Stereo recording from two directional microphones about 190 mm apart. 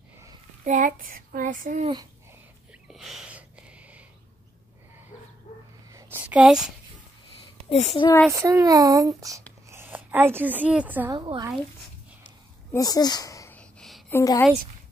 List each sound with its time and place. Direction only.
0.7 s child singing: 45° right (ahead or behind)
2.9 s a sound: centre (ahead or behind)
5.9 s a sound: 15° right (ahead or behind)
7.7 s a child's voice: 30° left (ahead or behind)
8.3 s a woman's voice: 15° right (ahead or behind)
11.1 s speech: 25° right (ahead or behind)
12.7 s speech: 20° left (ahead or behind)
13.6 s a sound: centre (ahead or behind)
14.1 s a woman's voice: 15° left (ahead or behind)